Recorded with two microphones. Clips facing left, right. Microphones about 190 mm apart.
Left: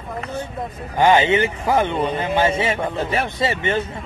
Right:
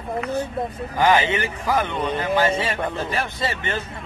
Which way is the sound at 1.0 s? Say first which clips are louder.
Left 4 dB; 25° left (ahead or behind).